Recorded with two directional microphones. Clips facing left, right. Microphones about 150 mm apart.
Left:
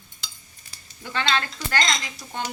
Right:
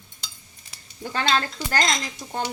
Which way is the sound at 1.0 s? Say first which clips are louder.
Right 2 dB; 40° right (ahead or behind).